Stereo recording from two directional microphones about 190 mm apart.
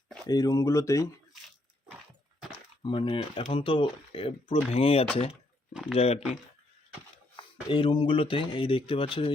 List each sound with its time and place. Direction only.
0.3 s speech: 20° left (ahead or behind)
2.8 s speech: 25° left (ahead or behind)
7.3 s speech: 25° left (ahead or behind)